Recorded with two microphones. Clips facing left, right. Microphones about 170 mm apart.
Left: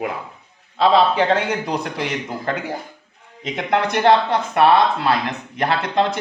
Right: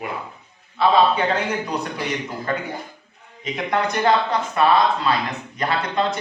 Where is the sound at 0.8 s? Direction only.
90° left.